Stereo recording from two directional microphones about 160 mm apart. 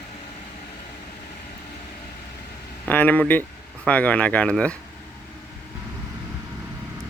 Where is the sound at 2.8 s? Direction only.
10° left (ahead or behind).